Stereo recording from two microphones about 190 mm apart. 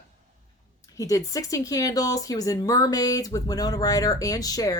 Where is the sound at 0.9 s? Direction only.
15° left (ahead or behind).